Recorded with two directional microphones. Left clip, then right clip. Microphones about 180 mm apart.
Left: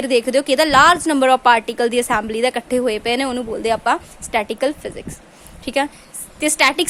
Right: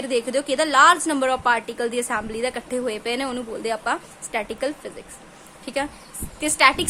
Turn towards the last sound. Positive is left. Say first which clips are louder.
# left 2 dB
turn(degrees=35)  # may be behind; listen again after turning